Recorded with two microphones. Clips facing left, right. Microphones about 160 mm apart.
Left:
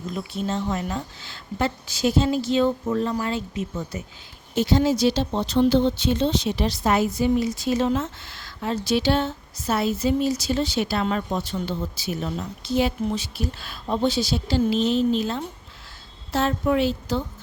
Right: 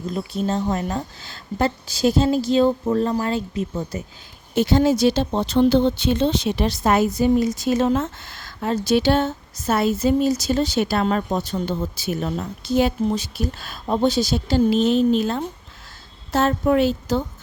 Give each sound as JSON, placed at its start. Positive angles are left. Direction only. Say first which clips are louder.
{"t": 0.0, "sound": "a woman's voice", "louder": "right 4 dB", "side_deg": -35}
{"t": 4.5, "sound": "speech", "louder": "right 3 dB", "side_deg": -55}